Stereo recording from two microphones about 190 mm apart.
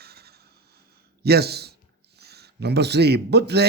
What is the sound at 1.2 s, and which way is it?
A man's voice, 55° right (ahead or behind).